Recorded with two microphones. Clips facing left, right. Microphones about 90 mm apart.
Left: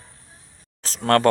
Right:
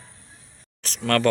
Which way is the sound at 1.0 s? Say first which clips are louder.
Left 4 dB; 30° left (ahead or behind).